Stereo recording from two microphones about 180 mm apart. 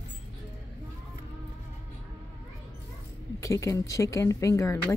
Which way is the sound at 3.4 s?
15° left (ahead or behind).